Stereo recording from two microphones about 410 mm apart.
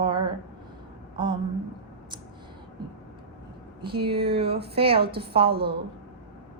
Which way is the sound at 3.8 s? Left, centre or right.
Centre.